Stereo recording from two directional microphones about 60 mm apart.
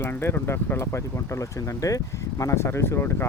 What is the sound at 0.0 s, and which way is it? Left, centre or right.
Speech, left.